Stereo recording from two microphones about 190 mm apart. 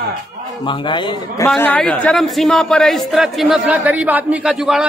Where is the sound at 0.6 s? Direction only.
25° left (ahead or behind).